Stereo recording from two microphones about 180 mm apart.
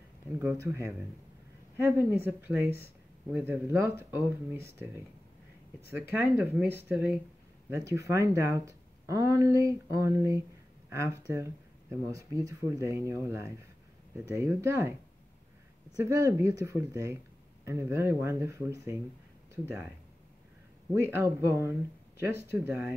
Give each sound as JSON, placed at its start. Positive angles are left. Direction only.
{"t": 0.4, "sound": "speech", "side_deg": -10}
{"t": 6.1, "sound": "speech", "side_deg": -10}
{"t": 16.0, "sound": "speech", "side_deg": -15}
{"t": 20.9, "sound": "speech", "side_deg": -15}